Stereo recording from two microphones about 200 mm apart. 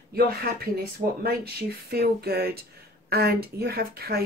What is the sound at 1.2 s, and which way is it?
Speech, 50° right (ahead or behind).